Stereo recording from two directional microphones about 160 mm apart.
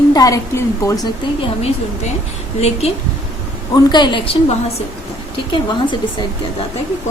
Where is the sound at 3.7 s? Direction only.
25° left (ahead or behind).